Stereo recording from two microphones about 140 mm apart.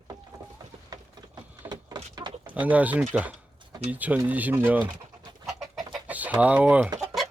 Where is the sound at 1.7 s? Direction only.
30° right (ahead or behind).